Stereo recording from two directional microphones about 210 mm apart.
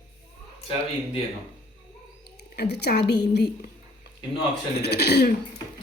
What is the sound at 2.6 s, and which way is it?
Speech, 50° left (ahead or behind).